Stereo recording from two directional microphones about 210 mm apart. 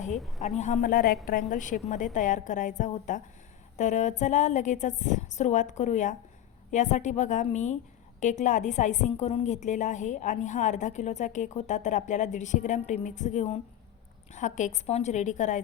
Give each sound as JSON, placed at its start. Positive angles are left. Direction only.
{"t": 0.2, "sound": "a woman's voice", "side_deg": 0}
{"t": 0.4, "sound": "a woman's voice", "side_deg": 35}